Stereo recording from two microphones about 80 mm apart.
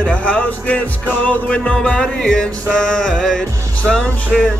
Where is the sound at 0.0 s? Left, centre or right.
Centre.